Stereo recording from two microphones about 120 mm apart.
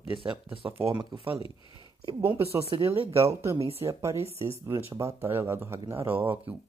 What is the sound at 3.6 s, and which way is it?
Speech, 55° right (ahead or behind).